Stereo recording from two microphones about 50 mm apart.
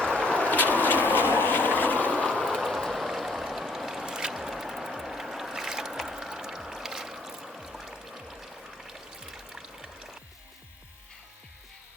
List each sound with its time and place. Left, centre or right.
0.0 s vehicle: left
1.8 s boat: left
2.6 s a sound: centre
4.0 s boat: centre
8.9 s music: centre